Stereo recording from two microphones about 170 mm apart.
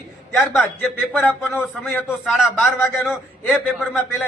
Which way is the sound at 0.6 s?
10° left (ahead or behind).